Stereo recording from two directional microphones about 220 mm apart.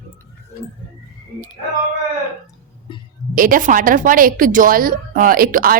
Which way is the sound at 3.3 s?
40° right (ahead or behind).